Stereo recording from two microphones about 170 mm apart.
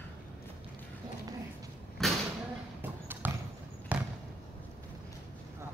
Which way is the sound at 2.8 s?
10° right (ahead or behind).